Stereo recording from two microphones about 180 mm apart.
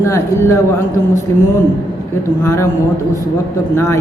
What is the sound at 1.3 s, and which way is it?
Speech, 15° left (ahead or behind).